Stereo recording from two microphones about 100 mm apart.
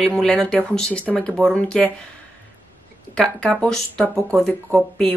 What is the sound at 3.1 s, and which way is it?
A woman's voice, 10° left (ahead or behind).